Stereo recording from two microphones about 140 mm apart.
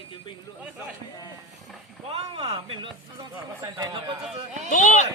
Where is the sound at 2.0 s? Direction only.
40° right (ahead or behind).